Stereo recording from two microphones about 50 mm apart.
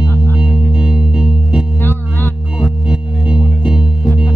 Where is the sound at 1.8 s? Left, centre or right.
Left.